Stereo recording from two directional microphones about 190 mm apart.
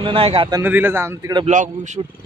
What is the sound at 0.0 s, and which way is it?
Speech, 30° right (ahead or behind).